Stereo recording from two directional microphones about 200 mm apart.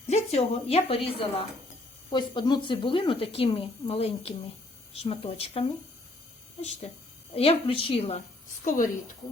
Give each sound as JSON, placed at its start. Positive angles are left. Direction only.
{"t": 0.1, "sound": "a woman's voice", "side_deg": 30}
{"t": 8.6, "sound": "a woman's voice", "side_deg": 40}